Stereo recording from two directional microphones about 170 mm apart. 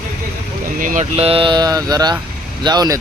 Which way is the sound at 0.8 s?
50° right (ahead or behind).